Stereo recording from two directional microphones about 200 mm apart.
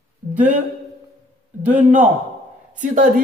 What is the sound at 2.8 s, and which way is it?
Speech, 40° right (ahead or behind).